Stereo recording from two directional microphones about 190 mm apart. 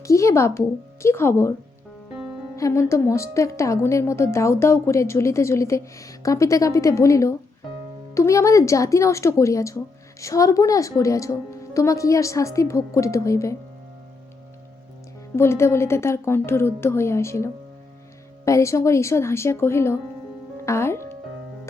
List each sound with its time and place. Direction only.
0.0 s a woman's voice: 15° left (ahead or behind)
2.6 s a woman's voice: 15° left (ahead or behind)
15.4 s a woman's voice: 15° left (ahead or behind)